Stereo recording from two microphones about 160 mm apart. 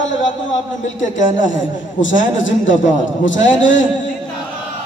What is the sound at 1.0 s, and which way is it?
Speech, 55° left (ahead or behind).